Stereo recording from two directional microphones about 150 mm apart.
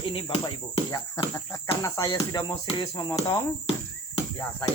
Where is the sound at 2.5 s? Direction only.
35° left (ahead or behind).